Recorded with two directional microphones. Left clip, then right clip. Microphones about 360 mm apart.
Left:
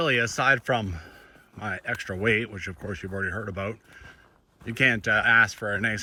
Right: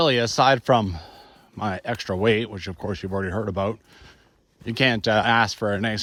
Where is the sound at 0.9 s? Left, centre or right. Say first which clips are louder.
Right 3 dB; centre.